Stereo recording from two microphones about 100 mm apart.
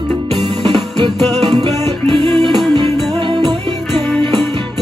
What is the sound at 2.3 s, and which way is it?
Music, centre (ahead or behind).